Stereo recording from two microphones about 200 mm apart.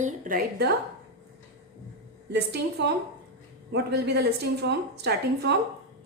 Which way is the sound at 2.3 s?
55° right (ahead or behind).